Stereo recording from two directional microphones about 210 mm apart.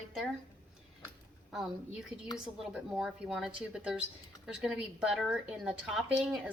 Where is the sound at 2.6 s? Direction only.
Centre (ahead or behind).